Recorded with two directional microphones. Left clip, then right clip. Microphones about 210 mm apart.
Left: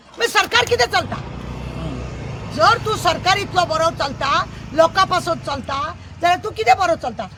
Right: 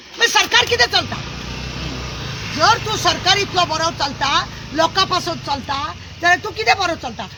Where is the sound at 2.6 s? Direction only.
25° left (ahead or behind).